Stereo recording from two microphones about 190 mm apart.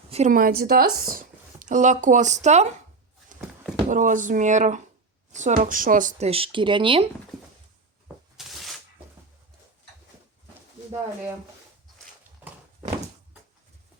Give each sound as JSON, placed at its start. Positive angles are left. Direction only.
{"t": 0.1, "sound": "a woman's voice", "side_deg": -40}
{"t": 3.8, "sound": "speech", "side_deg": -40}
{"t": 8.0, "sound": "shuffling cards", "side_deg": 0}